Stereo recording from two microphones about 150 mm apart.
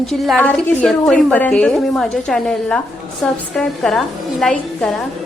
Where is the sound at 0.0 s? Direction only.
Centre (ahead or behind).